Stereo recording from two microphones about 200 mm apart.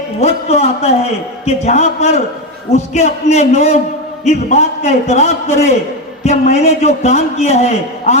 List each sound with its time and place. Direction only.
0.2 s a man's voice: 35° left (ahead or behind)